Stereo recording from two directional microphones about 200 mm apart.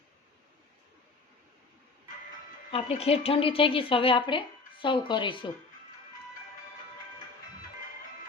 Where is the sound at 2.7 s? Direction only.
30° left (ahead or behind).